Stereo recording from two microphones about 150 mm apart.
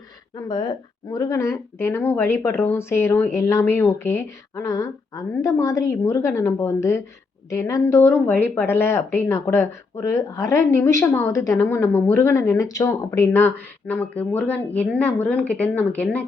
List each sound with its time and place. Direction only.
0.3 s a woman's voice: 25° left (ahead or behind); by 16.2 s 10° left (ahead or behind)